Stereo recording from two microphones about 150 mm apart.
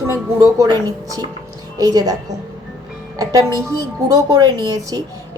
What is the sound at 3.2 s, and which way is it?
A woman's voice, 25° right (ahead or behind).